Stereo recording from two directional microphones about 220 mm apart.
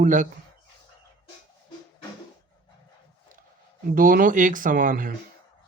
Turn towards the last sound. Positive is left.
turn(degrees=-35)  # may be behind; listen again after turning